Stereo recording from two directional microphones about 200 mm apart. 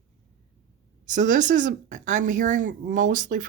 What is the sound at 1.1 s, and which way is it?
Speech, 40° right (ahead or behind).